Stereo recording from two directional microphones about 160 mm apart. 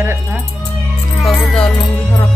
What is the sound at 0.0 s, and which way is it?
Music, 15° right (ahead or behind).